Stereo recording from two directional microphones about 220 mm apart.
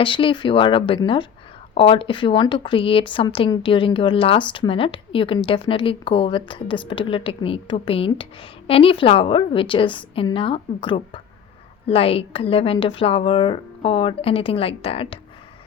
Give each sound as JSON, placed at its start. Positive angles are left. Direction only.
{"t": 0.0, "sound": "a woman's voice", "side_deg": 25}